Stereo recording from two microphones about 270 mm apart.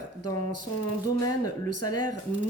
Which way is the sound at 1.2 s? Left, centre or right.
Left.